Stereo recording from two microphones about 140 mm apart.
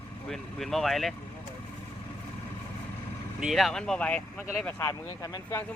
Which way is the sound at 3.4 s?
Centre (ahead or behind).